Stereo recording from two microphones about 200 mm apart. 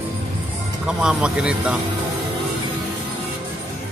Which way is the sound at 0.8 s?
5° right (ahead or behind).